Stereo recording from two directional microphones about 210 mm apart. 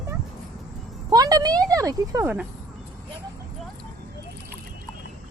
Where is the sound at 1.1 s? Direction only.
15° right (ahead or behind).